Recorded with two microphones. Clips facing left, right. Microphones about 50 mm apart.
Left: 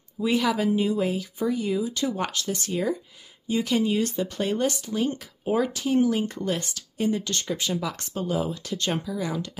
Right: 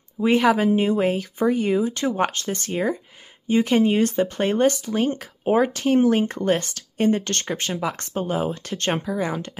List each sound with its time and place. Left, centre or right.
0.2 s speech: right
5.7 s speech: right